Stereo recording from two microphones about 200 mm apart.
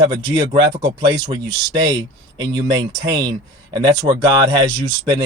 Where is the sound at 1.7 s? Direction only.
20° right (ahead or behind).